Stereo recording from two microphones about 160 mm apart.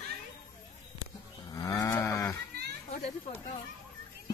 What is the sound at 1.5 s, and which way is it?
Livestock, 20° left (ahead or behind).